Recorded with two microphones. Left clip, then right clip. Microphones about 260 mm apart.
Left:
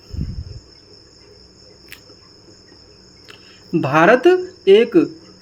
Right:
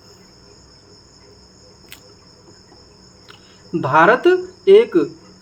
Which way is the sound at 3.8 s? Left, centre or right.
Left.